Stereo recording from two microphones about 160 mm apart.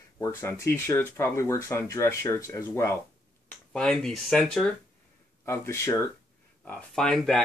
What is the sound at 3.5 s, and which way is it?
Speech, 5° left (ahead or behind).